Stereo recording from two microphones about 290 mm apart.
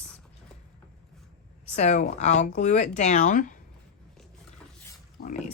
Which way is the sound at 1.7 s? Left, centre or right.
Left.